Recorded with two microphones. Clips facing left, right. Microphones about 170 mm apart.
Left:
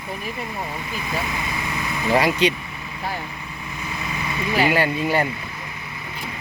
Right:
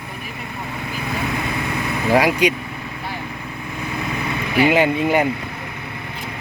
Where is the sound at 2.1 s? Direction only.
10° right (ahead or behind).